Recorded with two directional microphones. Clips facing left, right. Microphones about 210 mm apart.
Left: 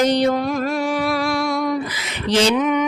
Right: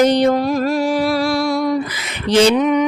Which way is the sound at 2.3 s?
55° right (ahead or behind).